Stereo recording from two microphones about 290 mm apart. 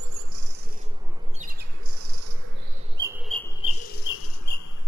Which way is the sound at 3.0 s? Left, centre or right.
Centre.